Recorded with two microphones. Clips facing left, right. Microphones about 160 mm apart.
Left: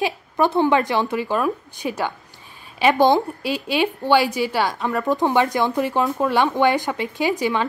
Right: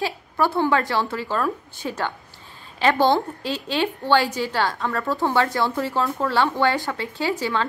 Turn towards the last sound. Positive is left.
turn(degrees=15)  # may be behind; listen again after turning